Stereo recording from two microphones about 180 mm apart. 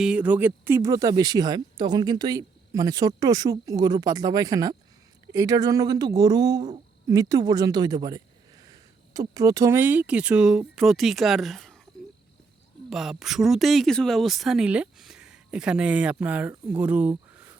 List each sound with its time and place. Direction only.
0.0 s speech: 5° right (ahead or behind)
12.9 s speech: centre (ahead or behind)